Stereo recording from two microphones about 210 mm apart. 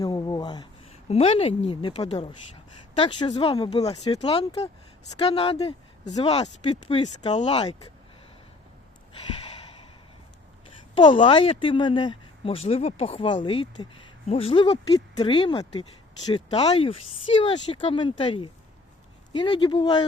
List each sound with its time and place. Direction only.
0.0 s a woman's voice: 20° left (ahead or behind)
10.9 s speech: 25° left (ahead or behind)